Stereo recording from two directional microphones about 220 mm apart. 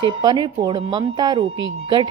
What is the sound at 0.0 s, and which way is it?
A woman's voice, 20° right (ahead or behind).